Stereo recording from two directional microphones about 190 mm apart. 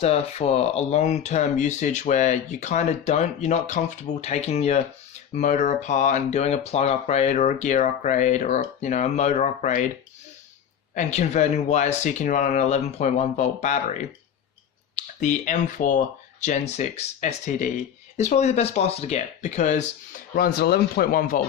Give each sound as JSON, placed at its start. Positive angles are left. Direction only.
{"t": 0.0, "sound": "speech", "side_deg": 35}
{"t": 10.9, "sound": "speech", "side_deg": 35}
{"t": 20.3, "sound": "speech", "side_deg": 55}